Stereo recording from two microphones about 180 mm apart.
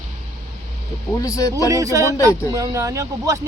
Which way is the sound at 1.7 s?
15° right (ahead or behind).